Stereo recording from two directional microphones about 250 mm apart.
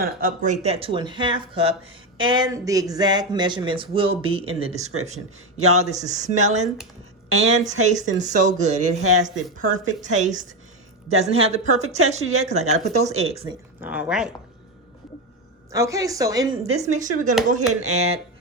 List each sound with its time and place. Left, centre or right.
0.0 s speech: right
13.8 s speech: centre
15.7 s speech: centre
16.8 s speech: right